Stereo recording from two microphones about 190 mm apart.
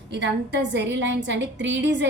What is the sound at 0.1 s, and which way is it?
A woman's voice, 70° right (ahead or behind).